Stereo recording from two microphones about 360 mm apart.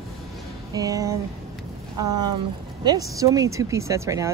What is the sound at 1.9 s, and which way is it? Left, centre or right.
Speech, right.